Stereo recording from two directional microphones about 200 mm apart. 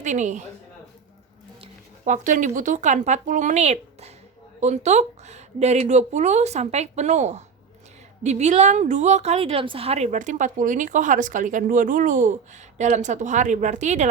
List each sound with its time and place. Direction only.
0.0 s a woman's voice: 35° right (ahead or behind)
1.6 s a woman's voice: 35° right (ahead or behind)